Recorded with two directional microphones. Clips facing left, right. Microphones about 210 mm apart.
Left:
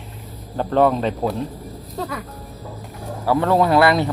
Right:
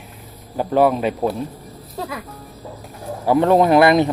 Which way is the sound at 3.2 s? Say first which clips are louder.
Right 3 dB; 20° right (ahead or behind).